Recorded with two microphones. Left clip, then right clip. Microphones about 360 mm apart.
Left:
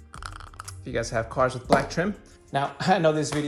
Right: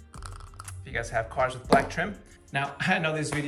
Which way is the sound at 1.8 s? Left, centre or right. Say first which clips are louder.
Even; centre.